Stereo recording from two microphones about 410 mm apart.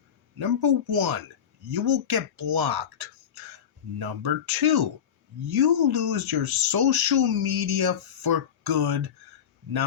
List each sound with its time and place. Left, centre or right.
0.3 s speech: right